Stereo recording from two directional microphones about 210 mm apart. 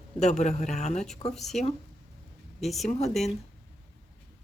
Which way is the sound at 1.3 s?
Centre (ahead or behind).